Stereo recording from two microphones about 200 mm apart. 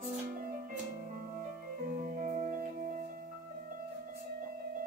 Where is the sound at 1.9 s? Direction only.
40° right (ahead or behind).